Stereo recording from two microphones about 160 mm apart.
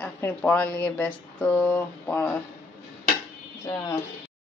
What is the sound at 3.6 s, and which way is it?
Speech, 25° left (ahead or behind).